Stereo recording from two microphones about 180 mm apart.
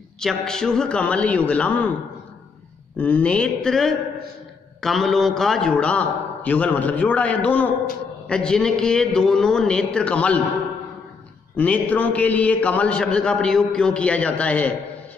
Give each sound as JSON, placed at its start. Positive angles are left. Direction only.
{"t": 0.2, "sound": "a man's voice", "side_deg": 5}
{"t": 3.0, "sound": "a man's voice", "side_deg": 5}
{"t": 11.5, "sound": "a man's voice", "side_deg": 10}